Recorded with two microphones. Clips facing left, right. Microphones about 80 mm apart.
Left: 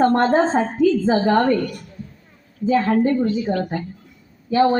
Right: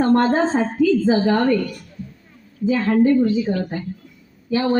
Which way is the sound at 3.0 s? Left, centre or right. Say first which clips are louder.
Right 3 dB; left.